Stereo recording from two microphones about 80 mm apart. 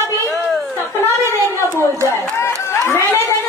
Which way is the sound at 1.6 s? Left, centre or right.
Right.